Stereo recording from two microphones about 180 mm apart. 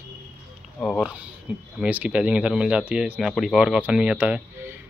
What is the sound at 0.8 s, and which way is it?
Speech, centre (ahead or behind).